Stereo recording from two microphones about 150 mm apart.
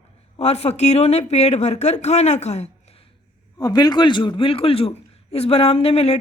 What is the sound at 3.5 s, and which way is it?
A man's voice, 25° left (ahead or behind).